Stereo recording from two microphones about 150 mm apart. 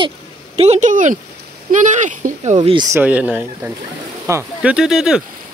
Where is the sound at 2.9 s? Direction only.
10° right (ahead or behind).